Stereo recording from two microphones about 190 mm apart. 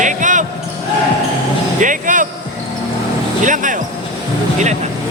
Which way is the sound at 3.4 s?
45° right (ahead or behind).